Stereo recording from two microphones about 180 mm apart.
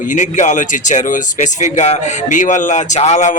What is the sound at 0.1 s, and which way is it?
Speech, 45° left (ahead or behind).